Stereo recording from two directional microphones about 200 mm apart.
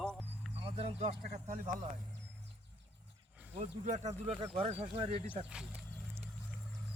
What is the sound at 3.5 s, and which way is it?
Speech, 35° right (ahead or behind).